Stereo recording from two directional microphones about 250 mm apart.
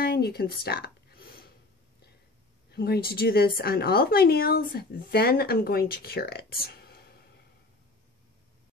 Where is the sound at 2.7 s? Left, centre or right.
Left.